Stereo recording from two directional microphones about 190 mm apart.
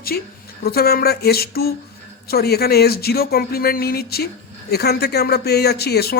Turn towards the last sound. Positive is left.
turn(degrees=55)  # may be behind; listen again after turning